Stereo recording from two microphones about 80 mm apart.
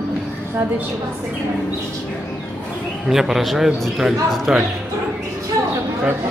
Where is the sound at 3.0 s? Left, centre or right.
Centre.